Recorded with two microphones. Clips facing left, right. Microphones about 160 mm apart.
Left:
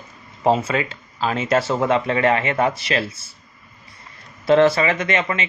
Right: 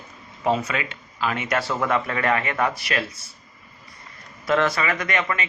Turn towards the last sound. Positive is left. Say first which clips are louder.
# left 3 dB
turn(degrees=25)  # may be behind; listen again after turning